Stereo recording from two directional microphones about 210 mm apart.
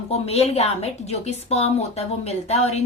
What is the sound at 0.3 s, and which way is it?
A woman's voice, 30° left (ahead or behind).